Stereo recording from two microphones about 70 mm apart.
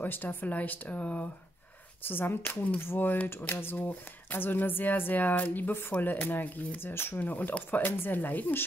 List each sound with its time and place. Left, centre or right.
0.0 s speech: left